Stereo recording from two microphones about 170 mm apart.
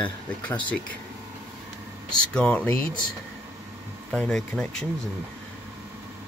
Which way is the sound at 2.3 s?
5° left (ahead or behind).